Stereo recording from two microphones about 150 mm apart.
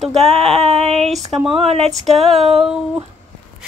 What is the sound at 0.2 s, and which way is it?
Female singing, 40° right (ahead or behind).